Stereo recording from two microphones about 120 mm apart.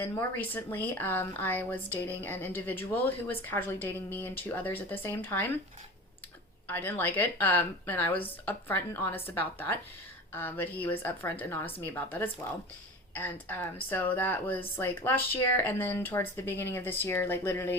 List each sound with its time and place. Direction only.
0.0 s speech: 15° left (ahead or behind)
6.7 s speech: 15° left (ahead or behind)